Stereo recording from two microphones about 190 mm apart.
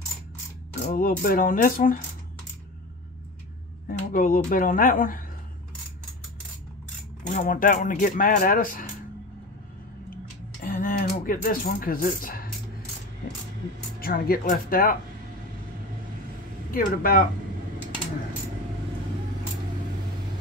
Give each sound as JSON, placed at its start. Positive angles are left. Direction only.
{"t": 0.8, "sound": "speech", "side_deg": 50}
{"t": 3.8, "sound": "speech", "side_deg": 45}
{"t": 7.2, "sound": "speech", "side_deg": 45}
{"t": 10.6, "sound": "speech", "side_deg": 45}
{"t": 13.9, "sound": "speech", "side_deg": 50}
{"t": 16.7, "sound": "speech", "side_deg": 50}